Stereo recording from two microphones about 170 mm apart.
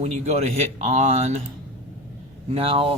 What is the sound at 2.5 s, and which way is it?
Speech, 35° right (ahead or behind).